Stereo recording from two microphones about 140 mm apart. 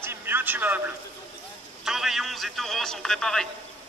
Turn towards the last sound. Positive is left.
turn(degrees=5)  # may be behind; listen again after turning